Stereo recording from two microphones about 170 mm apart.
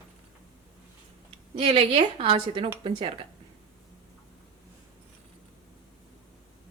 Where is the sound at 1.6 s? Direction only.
35° right (ahead or behind).